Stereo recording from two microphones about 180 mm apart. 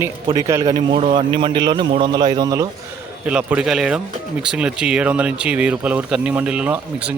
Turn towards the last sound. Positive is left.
turn(degrees=-5)  # may be behind; listen again after turning